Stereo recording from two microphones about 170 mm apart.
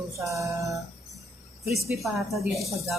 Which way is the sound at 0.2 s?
20° right (ahead or behind).